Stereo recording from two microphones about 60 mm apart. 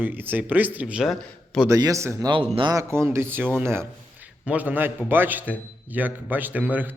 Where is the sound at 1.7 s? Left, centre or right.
Right.